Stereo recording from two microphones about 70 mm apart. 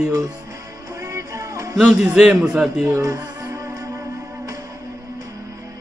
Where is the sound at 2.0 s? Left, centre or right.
Centre.